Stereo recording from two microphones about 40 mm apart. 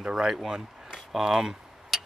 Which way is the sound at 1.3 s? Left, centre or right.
Centre.